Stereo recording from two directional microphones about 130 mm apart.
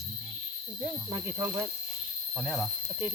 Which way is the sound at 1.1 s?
30° right (ahead or behind).